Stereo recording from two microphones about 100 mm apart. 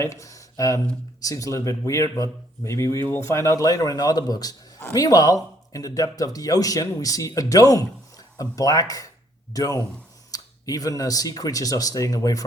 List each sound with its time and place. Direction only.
0.0 s speech: 30° left (ahead or behind)